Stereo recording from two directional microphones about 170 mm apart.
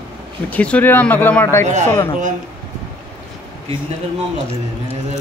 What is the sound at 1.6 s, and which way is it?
Speech, 45° right (ahead or behind).